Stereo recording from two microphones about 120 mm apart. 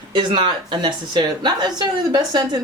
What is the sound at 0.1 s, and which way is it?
A woman's voice, 40° right (ahead or behind).